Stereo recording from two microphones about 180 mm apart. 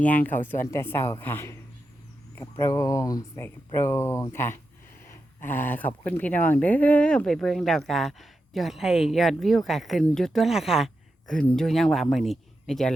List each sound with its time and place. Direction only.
0.0 s speech: 10° left (ahead or behind)